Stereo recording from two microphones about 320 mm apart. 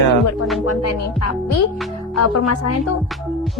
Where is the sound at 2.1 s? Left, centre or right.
Left.